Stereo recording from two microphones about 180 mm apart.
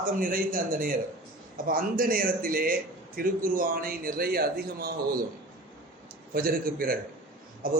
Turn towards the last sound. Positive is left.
turn(degrees=-50)  # may be behind; listen again after turning